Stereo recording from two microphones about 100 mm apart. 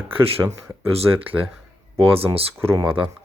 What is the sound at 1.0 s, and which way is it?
Speech, 65° right (ahead or behind).